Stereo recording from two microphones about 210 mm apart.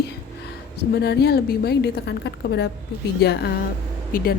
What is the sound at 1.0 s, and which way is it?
A woman's voice, 50° left (ahead or behind).